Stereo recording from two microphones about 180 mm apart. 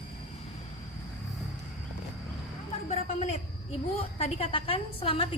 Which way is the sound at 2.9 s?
35° left (ahead or behind).